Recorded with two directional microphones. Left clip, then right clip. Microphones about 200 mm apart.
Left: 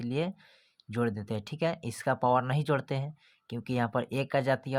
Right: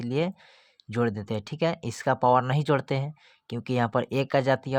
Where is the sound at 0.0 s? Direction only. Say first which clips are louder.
Right 5 dB; 20° right (ahead or behind).